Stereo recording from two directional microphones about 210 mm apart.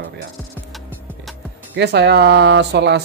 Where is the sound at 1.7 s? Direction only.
55° right (ahead or behind).